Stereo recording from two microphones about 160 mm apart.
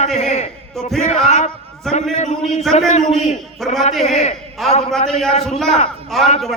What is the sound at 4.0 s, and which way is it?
Speech, 45° left (ahead or behind).